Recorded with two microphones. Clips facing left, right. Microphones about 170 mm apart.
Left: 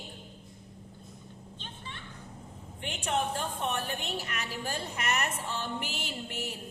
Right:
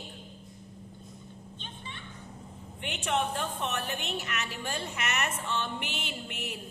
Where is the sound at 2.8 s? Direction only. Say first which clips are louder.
Right 1 dB; 30° left (ahead or behind).